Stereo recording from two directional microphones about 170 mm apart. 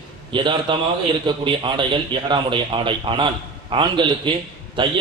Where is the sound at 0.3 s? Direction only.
30° right (ahead or behind).